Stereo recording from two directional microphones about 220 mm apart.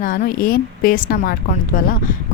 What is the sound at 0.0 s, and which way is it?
Speech, 40° left (ahead or behind).